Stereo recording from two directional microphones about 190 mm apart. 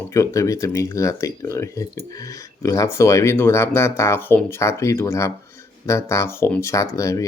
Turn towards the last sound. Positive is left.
turn(degrees=15)  # may be behind; listen again after turning